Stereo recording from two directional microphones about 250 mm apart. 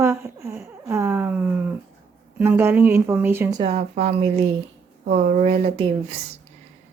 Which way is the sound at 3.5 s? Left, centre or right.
Right.